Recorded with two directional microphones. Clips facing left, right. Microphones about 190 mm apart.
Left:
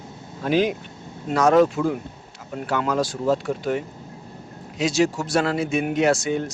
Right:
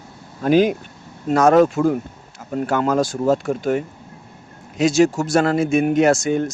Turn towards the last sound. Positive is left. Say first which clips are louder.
# right 4 dB
turn(degrees=-45)  # may be behind; listen again after turning